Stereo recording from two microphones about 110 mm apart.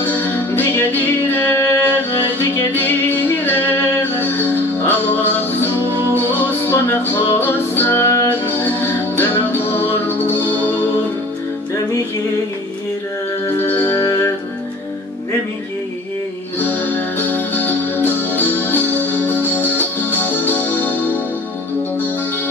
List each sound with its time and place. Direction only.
0.0 s music: 15° left (ahead or behind)
5.8 s music: 20° right (ahead or behind)
6.3 s music: 15° left (ahead or behind)
13.7 s music: 15° left (ahead or behind)
16.5 s music: 15° left (ahead or behind)